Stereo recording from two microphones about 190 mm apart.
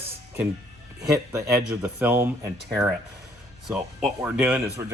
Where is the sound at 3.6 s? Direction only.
Centre (ahead or behind).